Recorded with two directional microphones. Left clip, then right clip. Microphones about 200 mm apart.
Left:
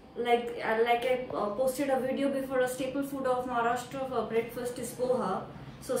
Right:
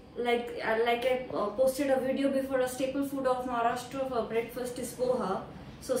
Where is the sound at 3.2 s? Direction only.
5° left (ahead or behind).